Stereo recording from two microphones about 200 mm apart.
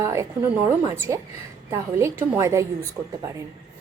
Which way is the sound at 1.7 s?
15° right (ahead or behind).